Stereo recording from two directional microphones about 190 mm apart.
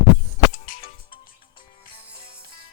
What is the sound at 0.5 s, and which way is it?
Music, 45° left (ahead or behind).